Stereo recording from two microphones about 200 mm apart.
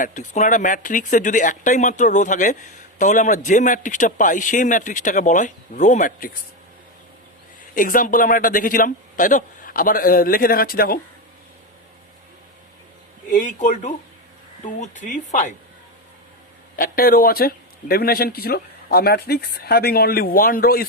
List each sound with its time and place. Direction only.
0.0 s speech: 40° left (ahead or behind)
7.8 s speech: 40° left (ahead or behind)
13.3 s speech: 40° left (ahead or behind)
16.7 s speech: 45° left (ahead or behind)